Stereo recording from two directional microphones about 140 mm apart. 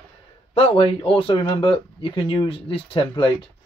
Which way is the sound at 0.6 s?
40° left (ahead or behind).